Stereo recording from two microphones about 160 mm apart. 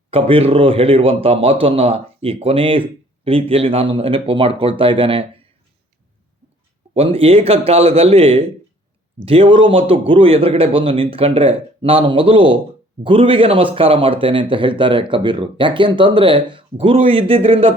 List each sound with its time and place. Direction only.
0.1 s speech: 35° right (ahead or behind)
6.9 s speech: 40° right (ahead or behind)